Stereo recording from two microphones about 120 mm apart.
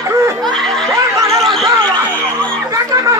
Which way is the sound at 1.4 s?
Centre (ahead or behind).